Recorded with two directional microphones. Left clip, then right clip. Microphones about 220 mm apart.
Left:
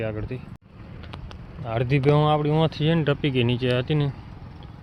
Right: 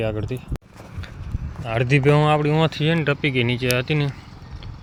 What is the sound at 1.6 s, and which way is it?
Speech, 5° right (ahead or behind).